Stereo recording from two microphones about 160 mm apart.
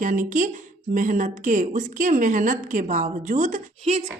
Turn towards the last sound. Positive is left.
turn(degrees=-45)  # may be behind; listen again after turning